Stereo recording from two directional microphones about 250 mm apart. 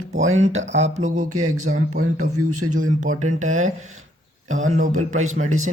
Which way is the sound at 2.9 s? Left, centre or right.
Right.